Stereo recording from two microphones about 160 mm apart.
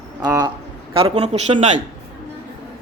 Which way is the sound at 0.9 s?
40° right (ahead or behind).